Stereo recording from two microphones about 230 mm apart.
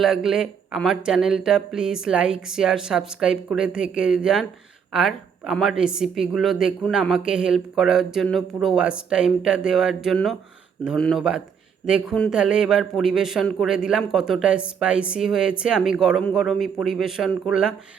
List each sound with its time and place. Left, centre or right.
0.0 s a man's voice: centre